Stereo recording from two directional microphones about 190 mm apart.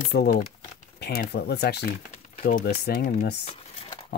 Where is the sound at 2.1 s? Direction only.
45° left (ahead or behind).